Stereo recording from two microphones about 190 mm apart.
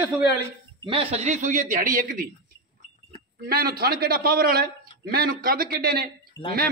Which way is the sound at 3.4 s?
55° right (ahead or behind).